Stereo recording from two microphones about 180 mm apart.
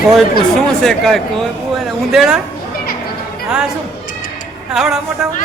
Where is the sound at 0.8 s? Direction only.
Centre (ahead or behind).